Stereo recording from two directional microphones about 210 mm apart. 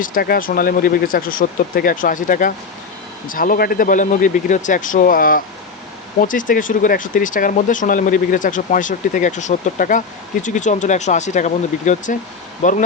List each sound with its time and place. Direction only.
0.0 s speech: 45° left (ahead or behind)